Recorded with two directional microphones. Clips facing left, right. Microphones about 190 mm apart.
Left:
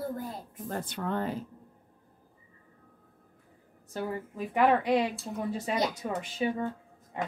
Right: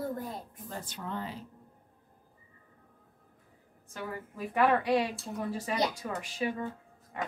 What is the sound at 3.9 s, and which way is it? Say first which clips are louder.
Speech: left 6 dB; 35° left (ahead or behind).